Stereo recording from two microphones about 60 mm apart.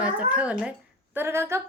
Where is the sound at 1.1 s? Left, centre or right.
Right.